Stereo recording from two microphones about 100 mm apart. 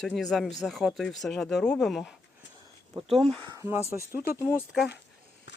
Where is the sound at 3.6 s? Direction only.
30° right (ahead or behind).